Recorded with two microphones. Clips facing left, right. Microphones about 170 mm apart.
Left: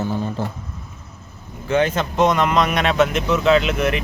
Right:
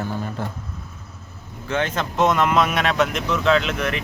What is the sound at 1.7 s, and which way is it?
Speech, 5° left (ahead or behind).